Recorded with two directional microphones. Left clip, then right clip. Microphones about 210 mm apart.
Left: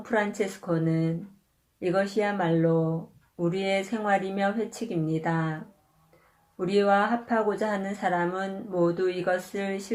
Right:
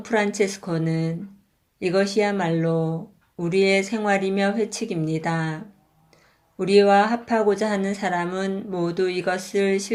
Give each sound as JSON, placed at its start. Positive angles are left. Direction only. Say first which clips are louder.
{"t": 0.0, "sound": "speech", "louder": "right 5 dB", "side_deg": -30}
{"t": 6.6, "sound": "speech", "louder": "right 7 dB", "side_deg": -35}